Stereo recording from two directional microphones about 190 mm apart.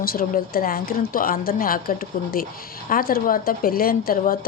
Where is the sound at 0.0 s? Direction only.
50° left (ahead or behind).